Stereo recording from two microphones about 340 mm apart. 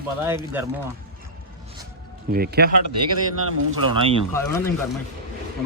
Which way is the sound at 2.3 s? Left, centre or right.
Right.